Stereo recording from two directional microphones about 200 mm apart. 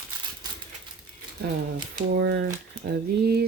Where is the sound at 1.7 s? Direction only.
45° right (ahead or behind).